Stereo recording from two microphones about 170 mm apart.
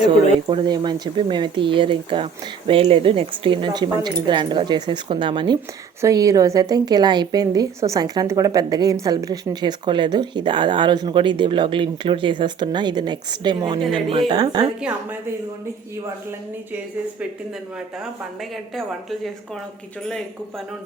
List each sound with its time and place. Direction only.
0.0 s a woman's voice: 25° right (ahead or behind)